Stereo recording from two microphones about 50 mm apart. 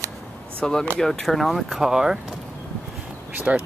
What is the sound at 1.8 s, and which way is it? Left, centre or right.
Speech, centre.